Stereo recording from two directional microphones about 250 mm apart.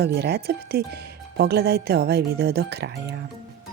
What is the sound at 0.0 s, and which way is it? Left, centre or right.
Speech, right.